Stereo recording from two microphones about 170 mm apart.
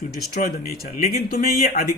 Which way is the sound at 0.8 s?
40° left (ahead or behind).